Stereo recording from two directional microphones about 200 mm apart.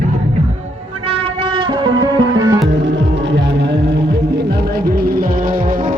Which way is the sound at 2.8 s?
60° right (ahead or behind).